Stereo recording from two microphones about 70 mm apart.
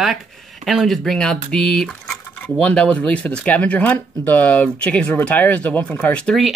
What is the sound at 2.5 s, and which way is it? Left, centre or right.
Speech, centre.